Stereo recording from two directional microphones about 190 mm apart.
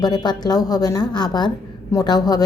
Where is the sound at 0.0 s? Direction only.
20° left (ahead or behind).